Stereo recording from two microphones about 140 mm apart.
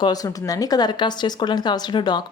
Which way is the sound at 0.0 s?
25° left (ahead or behind).